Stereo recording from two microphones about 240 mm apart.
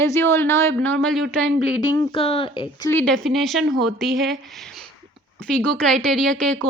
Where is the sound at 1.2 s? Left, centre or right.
Right.